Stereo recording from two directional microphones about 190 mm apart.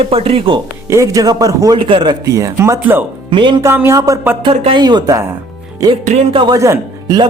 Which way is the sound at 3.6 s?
15° right (ahead or behind).